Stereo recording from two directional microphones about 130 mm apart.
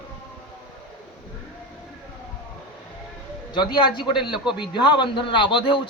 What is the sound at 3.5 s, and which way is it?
A man's voice, 35° left (ahead or behind).